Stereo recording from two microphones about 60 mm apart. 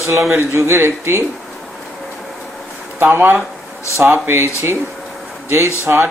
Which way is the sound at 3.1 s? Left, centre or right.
Right.